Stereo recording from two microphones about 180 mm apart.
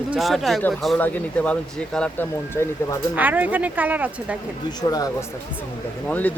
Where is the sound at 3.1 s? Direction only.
10° right (ahead or behind).